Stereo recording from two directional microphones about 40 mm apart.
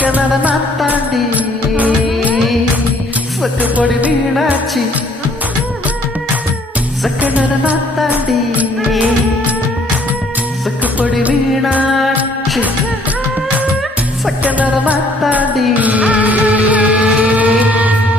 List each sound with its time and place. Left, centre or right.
0.0 s music: right
3.6 s music: right
7.2 s music: right
11.0 s music: right
14.4 s music: right